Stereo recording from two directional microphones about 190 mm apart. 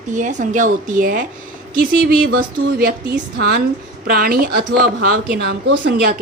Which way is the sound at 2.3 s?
50° right (ahead or behind).